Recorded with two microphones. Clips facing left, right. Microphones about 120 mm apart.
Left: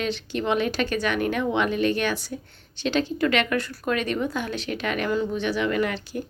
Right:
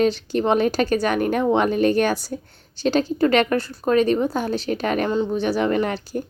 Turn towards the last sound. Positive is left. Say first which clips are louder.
# right 3 dB
turn(degrees=-40)  # may be behind; listen again after turning